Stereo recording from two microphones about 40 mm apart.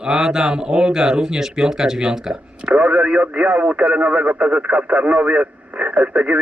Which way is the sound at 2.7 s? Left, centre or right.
Right.